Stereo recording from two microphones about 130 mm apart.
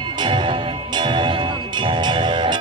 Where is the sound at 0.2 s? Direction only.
40° right (ahead or behind).